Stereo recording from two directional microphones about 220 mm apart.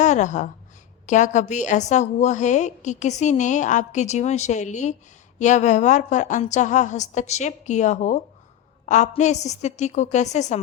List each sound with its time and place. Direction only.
0.0 s a woman's voice: 35° left (ahead or behind)